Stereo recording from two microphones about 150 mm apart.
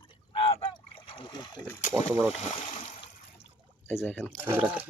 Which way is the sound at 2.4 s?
45° left (ahead or behind).